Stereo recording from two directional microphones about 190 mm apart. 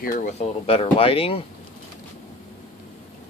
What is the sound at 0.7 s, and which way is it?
Speech, 30° left (ahead or behind).